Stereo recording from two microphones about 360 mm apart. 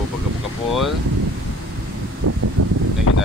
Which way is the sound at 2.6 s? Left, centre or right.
Right.